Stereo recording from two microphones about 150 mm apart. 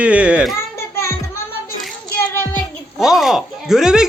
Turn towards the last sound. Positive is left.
turn(degrees=-5)  # may be behind; listen again after turning